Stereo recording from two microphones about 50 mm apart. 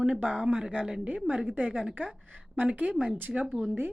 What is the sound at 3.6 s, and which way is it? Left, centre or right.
Speech, right.